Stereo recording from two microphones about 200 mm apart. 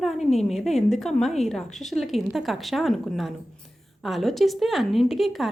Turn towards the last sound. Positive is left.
turn(degrees=0)  # may be behind; listen again after turning